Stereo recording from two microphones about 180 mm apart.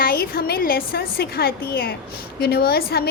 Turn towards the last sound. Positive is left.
turn(degrees=60)  # may be behind; listen again after turning